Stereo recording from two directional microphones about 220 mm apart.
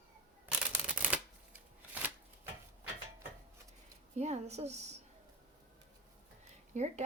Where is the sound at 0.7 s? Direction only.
5° right (ahead or behind).